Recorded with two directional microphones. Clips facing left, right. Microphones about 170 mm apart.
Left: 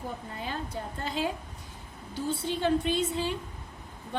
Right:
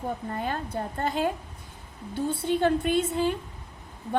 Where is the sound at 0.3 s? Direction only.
55° right (ahead or behind).